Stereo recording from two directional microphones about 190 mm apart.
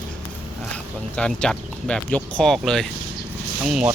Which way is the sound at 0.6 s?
5° left (ahead or behind).